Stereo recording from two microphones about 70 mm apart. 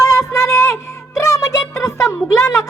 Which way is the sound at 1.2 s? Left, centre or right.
Left.